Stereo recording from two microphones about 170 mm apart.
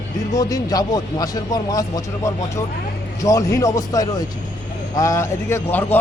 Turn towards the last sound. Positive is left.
turn(degrees=10)  # may be behind; listen again after turning